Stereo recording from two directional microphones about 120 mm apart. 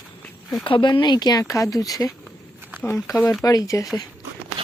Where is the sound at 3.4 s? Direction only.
30° left (ahead or behind).